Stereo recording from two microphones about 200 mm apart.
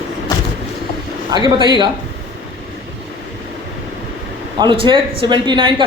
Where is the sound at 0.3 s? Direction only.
15° left (ahead or behind).